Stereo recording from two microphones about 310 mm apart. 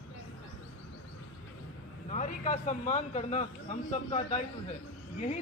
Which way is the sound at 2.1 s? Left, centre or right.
Left.